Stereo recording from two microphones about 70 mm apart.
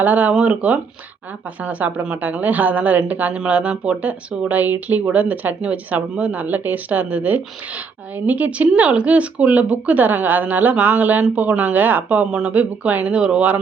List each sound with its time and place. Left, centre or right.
0.0 s a woman's voice: right